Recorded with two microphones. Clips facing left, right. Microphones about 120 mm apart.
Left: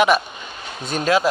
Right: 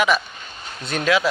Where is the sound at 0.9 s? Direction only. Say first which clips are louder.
Left 1 dB; 40° left (ahead or behind).